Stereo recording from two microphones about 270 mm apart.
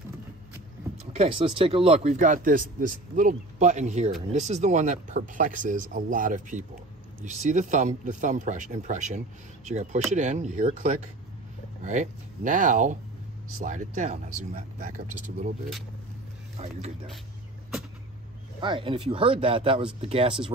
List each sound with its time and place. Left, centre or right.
1.1 s speech: right
16.5 s speech: right
18.6 s speech: centre